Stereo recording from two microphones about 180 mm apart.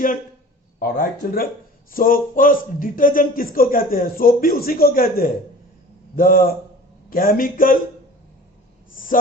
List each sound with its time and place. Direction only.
0.8 s a man's voice: 55° left (ahead or behind)